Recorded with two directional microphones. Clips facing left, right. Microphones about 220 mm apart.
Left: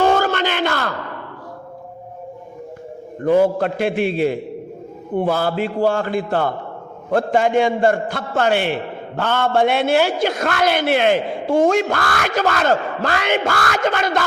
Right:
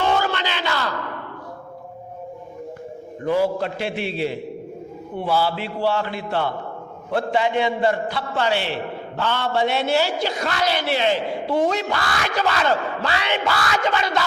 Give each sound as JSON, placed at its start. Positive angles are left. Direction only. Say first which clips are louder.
{"t": 0.0, "sound": "crowd", "louder": "left 5 dB", "side_deg": 45}
{"t": 3.2, "sound": "a man's voice", "louder": "left 5 dB", "side_deg": 55}